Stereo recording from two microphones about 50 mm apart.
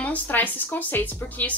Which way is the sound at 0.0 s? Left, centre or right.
Left.